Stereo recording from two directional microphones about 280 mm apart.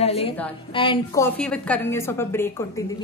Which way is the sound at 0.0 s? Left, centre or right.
Left.